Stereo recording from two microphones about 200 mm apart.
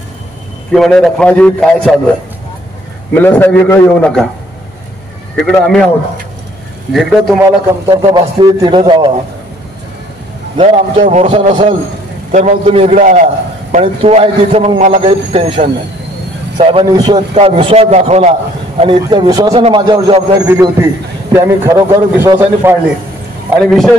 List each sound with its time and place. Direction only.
0.7 s a man's voice: centre (ahead or behind)
3.2 s a man's voice: 10° left (ahead or behind)
5.4 s a man's voice: 5° left (ahead or behind)
6.9 s a man's voice: centre (ahead or behind)
7.9 s a man's voice: 25° right (ahead or behind)
10.6 s a man's voice: 35° right (ahead or behind); by 22.8 s 10° right (ahead or behind)
23.6 s a man's voice: centre (ahead or behind)